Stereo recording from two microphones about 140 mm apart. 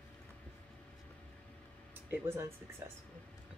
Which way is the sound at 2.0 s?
15° right (ahead or behind).